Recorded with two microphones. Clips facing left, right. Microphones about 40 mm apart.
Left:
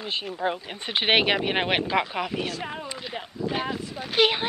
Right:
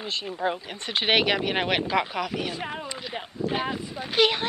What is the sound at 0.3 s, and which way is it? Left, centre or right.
Speech, centre.